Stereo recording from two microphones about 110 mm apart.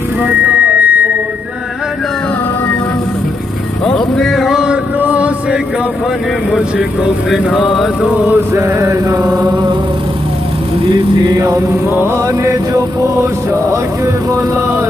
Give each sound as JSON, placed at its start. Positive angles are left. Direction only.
{"t": 0.3, "sound": "a sound", "side_deg": -10}
{"t": 3.8, "sound": "music", "side_deg": 5}
{"t": 7.2, "sound": "mantra", "side_deg": 0}
{"t": 8.3, "sound": "chant", "side_deg": -25}
{"t": 11.2, "sound": "chant", "side_deg": -30}